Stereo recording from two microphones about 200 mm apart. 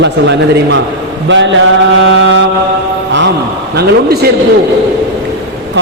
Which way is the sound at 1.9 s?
70° right (ahead or behind).